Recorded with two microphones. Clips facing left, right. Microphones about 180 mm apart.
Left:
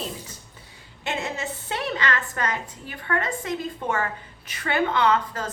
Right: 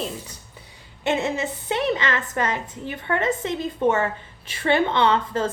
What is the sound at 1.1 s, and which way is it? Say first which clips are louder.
A woman's voice: right 6 dB; 20° right (ahead or behind).